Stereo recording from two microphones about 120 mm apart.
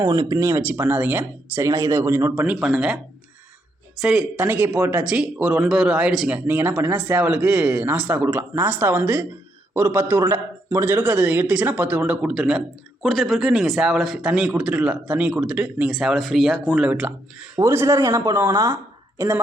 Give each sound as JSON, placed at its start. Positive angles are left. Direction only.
{"t": 0.0, "sound": "speech", "side_deg": -35}
{"t": 0.6, "sound": "speech", "side_deg": -15}
{"t": 2.3, "sound": "a man's voice", "side_deg": -10}
{"t": 17.6, "sound": "speech", "side_deg": -25}